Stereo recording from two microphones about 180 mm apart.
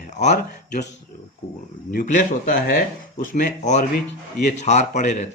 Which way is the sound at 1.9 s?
55° left (ahead or behind).